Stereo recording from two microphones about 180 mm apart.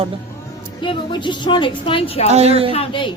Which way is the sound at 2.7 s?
30° left (ahead or behind).